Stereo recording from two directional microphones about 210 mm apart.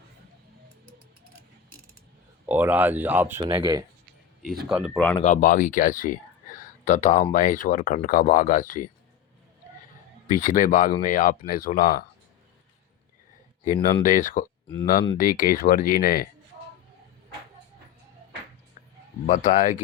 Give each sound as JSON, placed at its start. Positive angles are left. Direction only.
{"t": 2.5, "sound": "speech", "side_deg": -10}
{"t": 4.7, "sound": "speech", "side_deg": 0}
{"t": 5.2, "sound": "speech", "side_deg": 40}
{"t": 10.3, "sound": "speech", "side_deg": 40}
{"t": 13.8, "sound": "speech", "side_deg": 40}
{"t": 19.2, "sound": "speech", "side_deg": 35}